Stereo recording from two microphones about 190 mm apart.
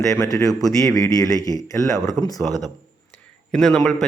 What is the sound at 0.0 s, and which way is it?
A man's voice, 15° left (ahead or behind).